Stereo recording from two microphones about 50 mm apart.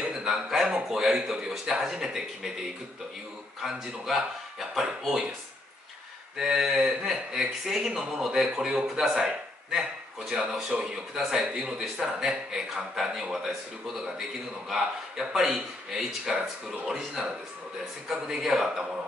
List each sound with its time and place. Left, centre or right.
0.0 s a sound: centre
0.8 s speech: centre
6.3 s speech: centre